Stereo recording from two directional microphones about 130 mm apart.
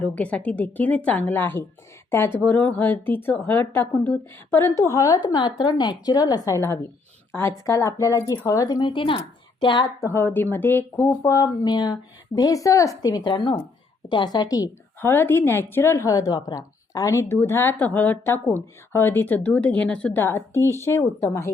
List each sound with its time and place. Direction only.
0.0 s a woman's voice: 10° left (ahead or behind); by 9.8 s 35° left (ahead or behind)
10.0 s speech: 20° left (ahead or behind)
15.1 s a woman's voice: 15° left (ahead or behind)